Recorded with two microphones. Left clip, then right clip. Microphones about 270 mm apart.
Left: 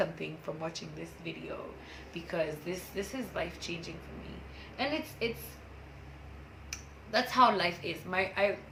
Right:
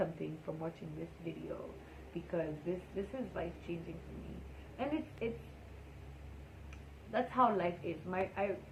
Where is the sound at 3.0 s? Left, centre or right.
Centre.